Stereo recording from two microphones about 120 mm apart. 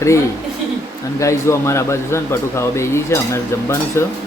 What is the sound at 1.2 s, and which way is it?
Speech, 25° left (ahead or behind).